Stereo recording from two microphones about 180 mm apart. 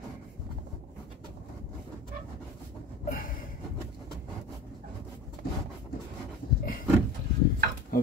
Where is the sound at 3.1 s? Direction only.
50° left (ahead or behind).